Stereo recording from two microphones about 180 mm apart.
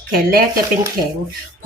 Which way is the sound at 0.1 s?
55° right (ahead or behind).